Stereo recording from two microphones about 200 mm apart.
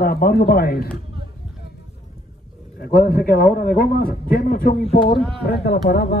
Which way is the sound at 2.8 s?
50° left (ahead or behind).